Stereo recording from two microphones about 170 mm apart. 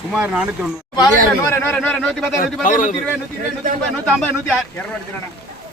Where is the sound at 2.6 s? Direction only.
50° left (ahead or behind).